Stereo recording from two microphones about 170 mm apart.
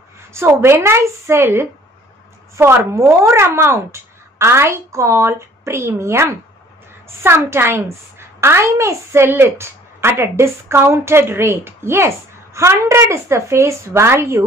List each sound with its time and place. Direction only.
0.3 s a child's voice: 15° right (ahead or behind)